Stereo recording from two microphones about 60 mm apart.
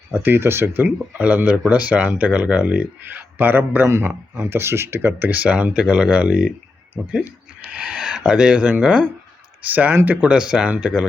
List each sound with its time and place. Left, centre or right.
0.1 s speech: right
0.9 s speech: right
3.8 s speech: right; by 6.5 s centre
7.7 s speech: centre
9.6 s speech: right
10.2 s speech: centre